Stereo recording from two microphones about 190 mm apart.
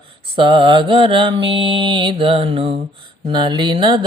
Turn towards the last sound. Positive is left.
turn(degrees=-25)  # may be behind; listen again after turning